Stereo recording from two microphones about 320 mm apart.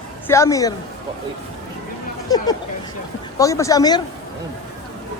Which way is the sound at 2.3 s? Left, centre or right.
Centre.